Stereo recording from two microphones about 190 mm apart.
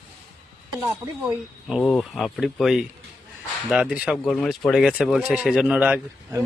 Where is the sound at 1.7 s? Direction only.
5° left (ahead or behind).